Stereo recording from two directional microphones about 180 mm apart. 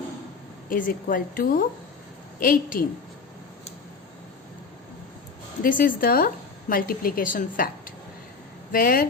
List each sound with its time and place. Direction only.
0.7 s a woman's voice: 50° left (ahead or behind)
5.6 s a woman's voice: 50° left (ahead or behind)